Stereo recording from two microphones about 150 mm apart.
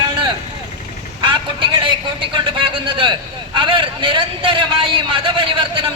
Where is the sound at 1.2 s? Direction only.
35° right (ahead or behind).